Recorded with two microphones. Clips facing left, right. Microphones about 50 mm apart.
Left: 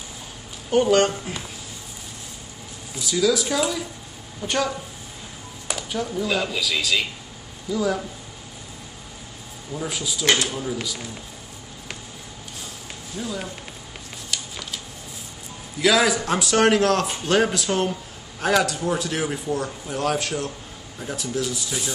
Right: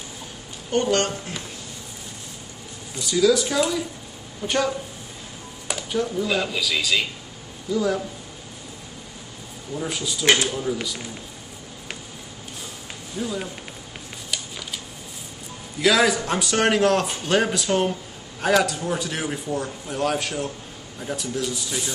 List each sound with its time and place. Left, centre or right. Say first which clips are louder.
0.7 s a man's voice: left 4 dB; centre
2.9 s a man's voice: right 2 dB; centre
9.8 s a man's voice: right 1 dB; centre
10.2 s speech: right 2 dB; right
10.5 s a man's voice: right 2 dB; centre
13.1 s a man's voice: right 2 dB; centre
14.3 s a sound: even; centre
15.8 s a man's voice: even; centre